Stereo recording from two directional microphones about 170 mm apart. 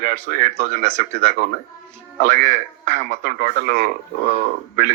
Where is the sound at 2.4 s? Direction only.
45° right (ahead or behind).